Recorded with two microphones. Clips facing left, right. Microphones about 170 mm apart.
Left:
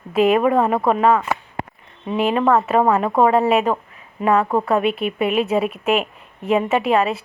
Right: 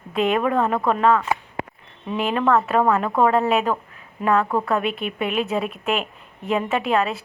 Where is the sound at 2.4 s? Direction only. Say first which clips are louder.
Left 1 dB; 20° left (ahead or behind).